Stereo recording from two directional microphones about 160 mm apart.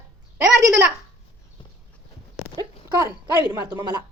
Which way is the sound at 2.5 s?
25° right (ahead or behind).